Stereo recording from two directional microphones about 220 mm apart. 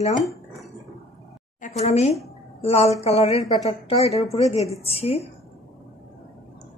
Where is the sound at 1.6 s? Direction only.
30° left (ahead or behind).